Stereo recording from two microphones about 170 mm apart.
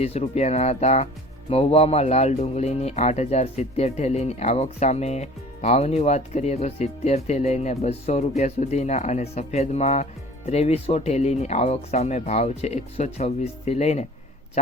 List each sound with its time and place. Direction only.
0.0 s speech: 40° left (ahead or behind)